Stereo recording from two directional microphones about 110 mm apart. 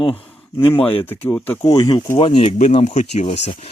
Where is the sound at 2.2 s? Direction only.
50° left (ahead or behind).